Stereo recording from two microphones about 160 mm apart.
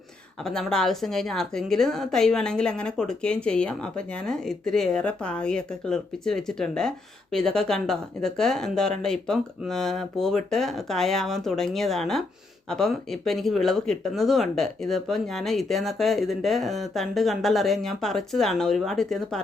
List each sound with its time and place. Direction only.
0.4 s a woman's voice: 5° left (ahead or behind)